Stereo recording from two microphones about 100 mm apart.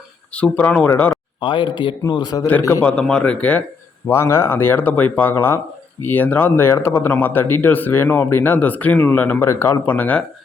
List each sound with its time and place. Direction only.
0.3 s speech: 15° left (ahead or behind)
1.4 s a man's voice: 55° left (ahead or behind)
2.8 s speech: 10° left (ahead or behind)
4.1 s speech: 25° left (ahead or behind)